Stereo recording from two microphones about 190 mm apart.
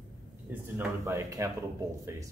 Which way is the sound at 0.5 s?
10° right (ahead or behind).